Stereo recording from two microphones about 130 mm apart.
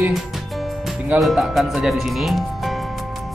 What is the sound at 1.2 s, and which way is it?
Speech, centre (ahead or behind).